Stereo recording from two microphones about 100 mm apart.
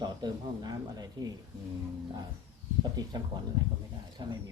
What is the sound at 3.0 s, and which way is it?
Speech, 45° right (ahead or behind).